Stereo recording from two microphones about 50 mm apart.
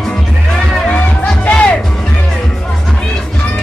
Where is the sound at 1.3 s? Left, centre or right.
Left.